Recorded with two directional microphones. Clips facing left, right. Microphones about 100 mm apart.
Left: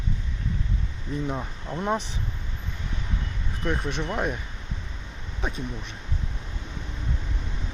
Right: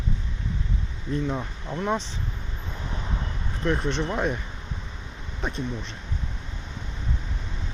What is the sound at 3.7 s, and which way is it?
Speech, 5° left (ahead or behind).